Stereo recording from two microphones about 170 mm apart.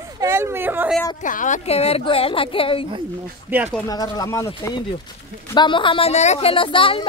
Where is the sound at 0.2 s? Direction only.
15° right (ahead or behind).